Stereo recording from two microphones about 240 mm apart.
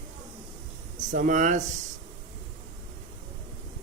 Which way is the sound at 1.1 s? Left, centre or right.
Right.